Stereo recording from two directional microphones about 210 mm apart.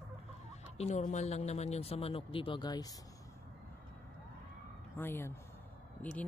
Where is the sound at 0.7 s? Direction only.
30° left (ahead or behind).